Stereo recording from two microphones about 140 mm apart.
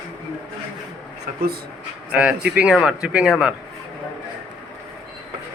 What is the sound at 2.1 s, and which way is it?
Speech, 10° right (ahead or behind).